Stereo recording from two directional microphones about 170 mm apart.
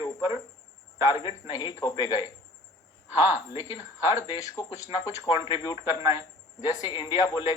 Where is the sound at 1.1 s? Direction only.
30° left (ahead or behind).